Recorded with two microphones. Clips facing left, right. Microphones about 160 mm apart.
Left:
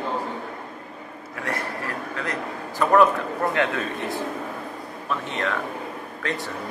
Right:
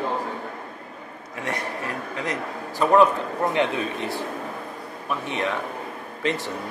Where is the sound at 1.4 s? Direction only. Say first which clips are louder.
Even; 20° right (ahead or behind).